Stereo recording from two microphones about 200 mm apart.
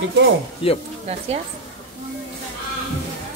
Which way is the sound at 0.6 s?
30° left (ahead or behind).